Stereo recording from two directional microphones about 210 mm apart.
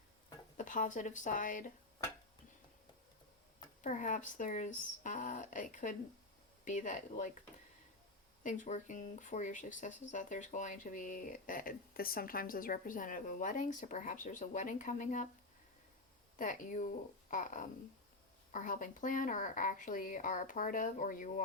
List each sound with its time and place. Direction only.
0.5 s speech: 35° left (ahead or behind)
3.8 s speech: 35° left (ahead or behind)
8.4 s speech: 35° left (ahead or behind)
16.4 s speech: 40° left (ahead or behind)